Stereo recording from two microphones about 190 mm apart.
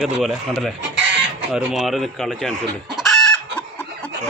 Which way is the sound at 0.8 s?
70° right (ahead or behind).